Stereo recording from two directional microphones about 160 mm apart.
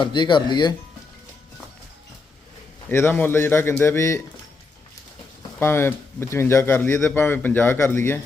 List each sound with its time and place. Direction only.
0.0 s speech: 30° left (ahead or behind)
2.9 s a man's voice: 15° left (ahead or behind)
5.5 s a man's voice: 15° left (ahead or behind)